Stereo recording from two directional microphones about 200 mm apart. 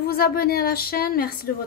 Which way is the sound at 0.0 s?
50° left (ahead or behind).